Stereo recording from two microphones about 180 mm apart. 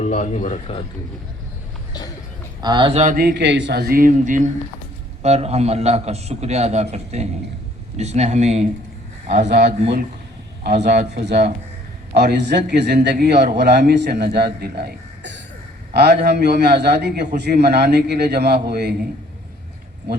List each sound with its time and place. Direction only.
0.0 s speech: 40° left (ahead or behind)
2.6 s speech: 25° right (ahead or behind)
3.0 s a man's voice: 50° right (ahead or behind)
10.8 s a man's voice: 65° right (ahead or behind)